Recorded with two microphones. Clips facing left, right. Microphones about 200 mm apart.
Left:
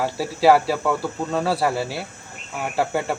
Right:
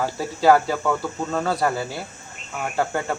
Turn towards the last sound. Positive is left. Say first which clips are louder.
# left 1 dB
turn(degrees=5)  # may be behind; listen again after turning